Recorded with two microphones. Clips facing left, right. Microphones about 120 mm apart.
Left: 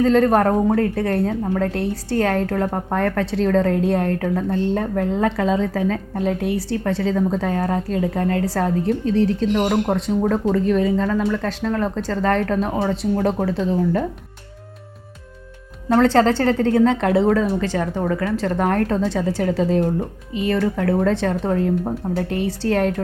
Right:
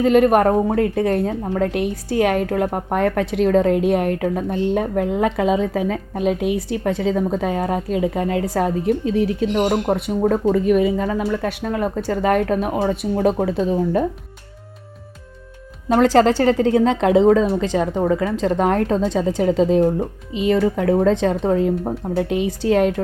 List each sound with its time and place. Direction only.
0.0 s a woman's voice: 10° right (ahead or behind)
15.9 s a woman's voice: 15° right (ahead or behind)